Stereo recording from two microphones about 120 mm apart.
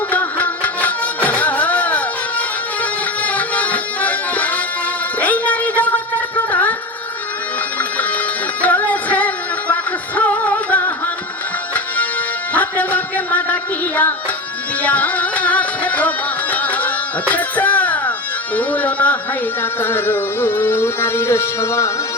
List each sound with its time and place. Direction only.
0.1 s music: 15° left (ahead or behind)
5.2 s a sound: 15° left (ahead or behind)
7.8 s music: 15° left (ahead or behind)
12.5 s music: 15° left (ahead or behind)